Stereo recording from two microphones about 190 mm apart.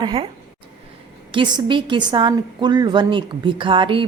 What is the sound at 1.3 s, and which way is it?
A woman's voice, 25° right (ahead or behind).